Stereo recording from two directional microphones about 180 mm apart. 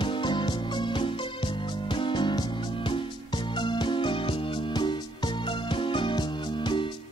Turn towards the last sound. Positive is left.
turn(degrees=25)  # may be behind; listen again after turning